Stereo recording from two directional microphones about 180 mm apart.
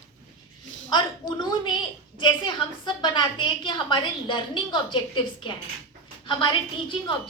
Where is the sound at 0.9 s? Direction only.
25° left (ahead or behind).